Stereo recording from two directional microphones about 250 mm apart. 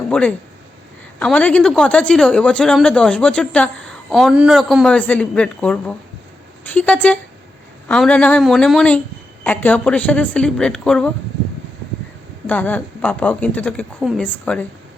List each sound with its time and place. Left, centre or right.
0.1 s a woman's voice: centre
12.5 s a woman's voice: centre